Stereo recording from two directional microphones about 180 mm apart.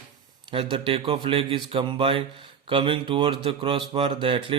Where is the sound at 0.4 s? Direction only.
30° right (ahead or behind).